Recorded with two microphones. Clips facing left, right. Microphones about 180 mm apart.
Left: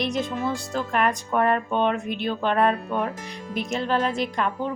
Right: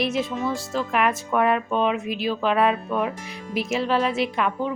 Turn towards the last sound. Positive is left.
turn(degrees=-5)  # may be behind; listen again after turning